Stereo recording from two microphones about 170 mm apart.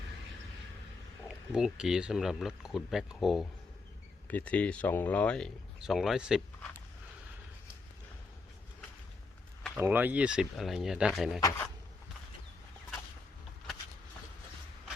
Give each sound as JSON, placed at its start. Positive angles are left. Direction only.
{"t": 1.3, "sound": "speech", "side_deg": -5}
{"t": 4.3, "sound": "speech", "side_deg": 10}
{"t": 9.7, "sound": "speech", "side_deg": -10}
{"t": 11.3, "sound": "speech", "side_deg": 15}